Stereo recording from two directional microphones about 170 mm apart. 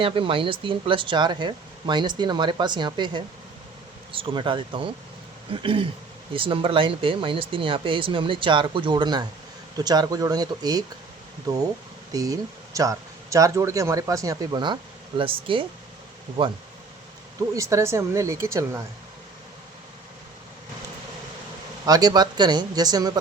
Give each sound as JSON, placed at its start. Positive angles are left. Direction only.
{"t": 0.0, "sound": "speech", "side_deg": -30}
{"t": 17.5, "sound": "speech", "side_deg": -20}
{"t": 21.8, "sound": "speech", "side_deg": -25}